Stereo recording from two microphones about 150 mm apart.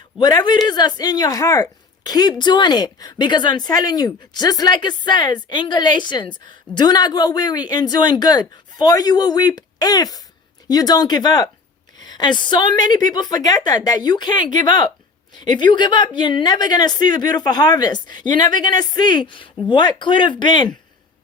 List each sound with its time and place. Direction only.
0.2 s a woman's voice: 25° left (ahead or behind)